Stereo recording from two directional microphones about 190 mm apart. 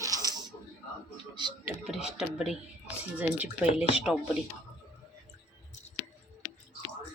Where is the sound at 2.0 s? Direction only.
Centre (ahead or behind).